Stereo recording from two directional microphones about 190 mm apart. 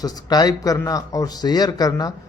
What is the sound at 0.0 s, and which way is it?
Speech, 20° left (ahead or behind).